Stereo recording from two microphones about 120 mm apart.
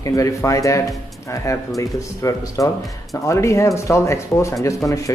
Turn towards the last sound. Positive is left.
turn(degrees=30)  # may be behind; listen again after turning